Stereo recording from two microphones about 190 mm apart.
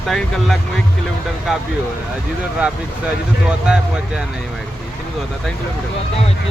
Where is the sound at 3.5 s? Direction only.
5° right (ahead or behind).